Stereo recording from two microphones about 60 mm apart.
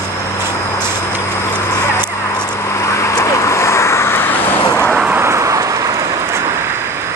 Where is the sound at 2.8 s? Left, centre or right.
Left.